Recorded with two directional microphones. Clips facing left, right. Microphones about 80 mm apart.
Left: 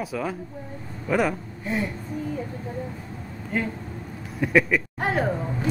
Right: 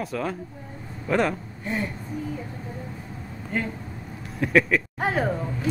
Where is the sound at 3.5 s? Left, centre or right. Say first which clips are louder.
Left 1 dB; centre.